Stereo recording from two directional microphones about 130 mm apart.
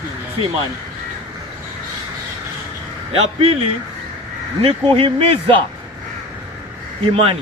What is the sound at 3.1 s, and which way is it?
A man's voice, 45° right (ahead or behind).